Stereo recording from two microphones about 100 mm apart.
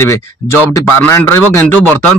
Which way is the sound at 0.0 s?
25° left (ahead or behind).